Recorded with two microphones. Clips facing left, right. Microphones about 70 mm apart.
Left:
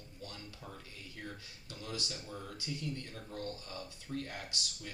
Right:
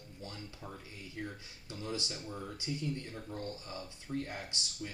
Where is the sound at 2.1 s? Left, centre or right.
Centre.